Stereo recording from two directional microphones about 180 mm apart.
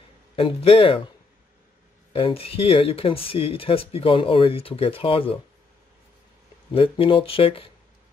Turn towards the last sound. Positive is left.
turn(degrees=30)  # may be behind; listen again after turning